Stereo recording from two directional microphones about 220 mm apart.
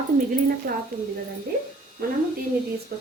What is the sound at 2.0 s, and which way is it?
Speech, 45° right (ahead or behind).